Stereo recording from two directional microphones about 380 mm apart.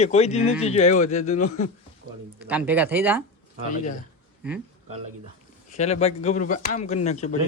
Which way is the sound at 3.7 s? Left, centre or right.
Centre.